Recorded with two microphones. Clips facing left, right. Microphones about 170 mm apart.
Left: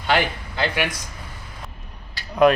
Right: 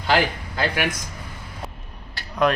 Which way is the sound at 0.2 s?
40° right (ahead or behind).